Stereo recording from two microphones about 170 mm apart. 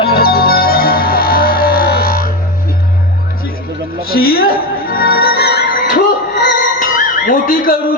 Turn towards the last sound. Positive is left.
turn(degrees=55)  # may be behind; listen again after turning